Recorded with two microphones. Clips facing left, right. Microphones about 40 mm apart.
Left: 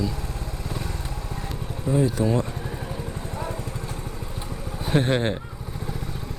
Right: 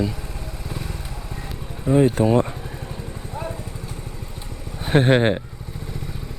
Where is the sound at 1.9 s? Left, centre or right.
Right.